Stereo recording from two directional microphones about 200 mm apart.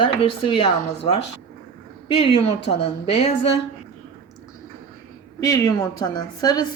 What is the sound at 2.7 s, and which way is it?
Speech, 30° left (ahead or behind).